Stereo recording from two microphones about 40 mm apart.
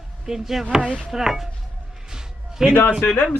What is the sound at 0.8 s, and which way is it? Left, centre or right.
Speech, right.